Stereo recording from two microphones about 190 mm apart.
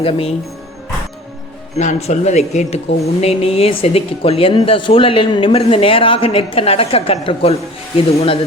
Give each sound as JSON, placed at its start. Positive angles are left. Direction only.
{"t": 0.0, "sound": "a man's voice", "side_deg": 30}
{"t": 1.8, "sound": "a man's voice", "side_deg": 35}